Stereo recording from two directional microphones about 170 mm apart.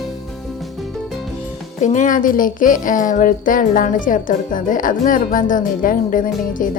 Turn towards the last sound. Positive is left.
turn(degrees=50)  # may be behind; listen again after turning